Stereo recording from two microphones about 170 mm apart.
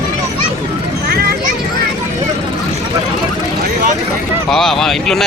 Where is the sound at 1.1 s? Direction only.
65° right (ahead or behind).